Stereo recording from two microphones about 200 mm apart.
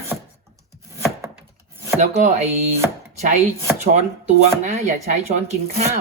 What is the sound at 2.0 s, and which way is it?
Speech, 35° right (ahead or behind).